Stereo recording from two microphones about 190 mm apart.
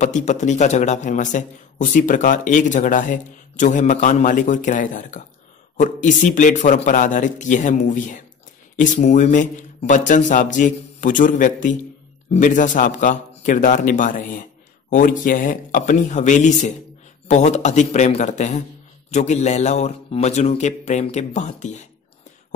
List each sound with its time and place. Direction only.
0.0 s a man's voice: 40° left (ahead or behind)